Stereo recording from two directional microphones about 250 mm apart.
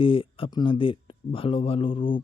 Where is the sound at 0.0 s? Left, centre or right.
Left.